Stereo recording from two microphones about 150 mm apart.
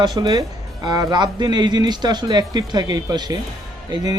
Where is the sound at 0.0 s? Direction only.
30° right (ahead or behind).